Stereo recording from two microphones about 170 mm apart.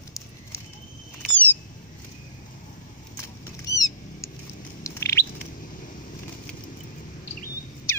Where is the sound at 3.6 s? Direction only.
20° left (ahead or behind).